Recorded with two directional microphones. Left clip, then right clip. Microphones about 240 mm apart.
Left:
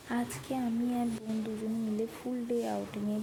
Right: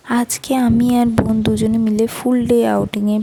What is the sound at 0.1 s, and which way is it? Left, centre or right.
Speech, right.